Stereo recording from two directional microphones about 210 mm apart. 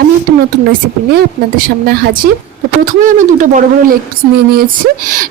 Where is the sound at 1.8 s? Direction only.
45° right (ahead or behind).